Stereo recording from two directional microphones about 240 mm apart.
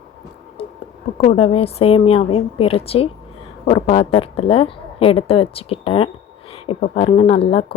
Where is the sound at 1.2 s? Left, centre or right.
Left.